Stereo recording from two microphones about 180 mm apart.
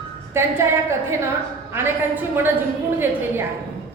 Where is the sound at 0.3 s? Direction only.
15° right (ahead or behind).